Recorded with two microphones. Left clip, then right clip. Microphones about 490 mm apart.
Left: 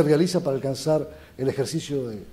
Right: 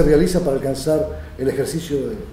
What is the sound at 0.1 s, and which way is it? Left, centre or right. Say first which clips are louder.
Speech: right 5 dB; centre.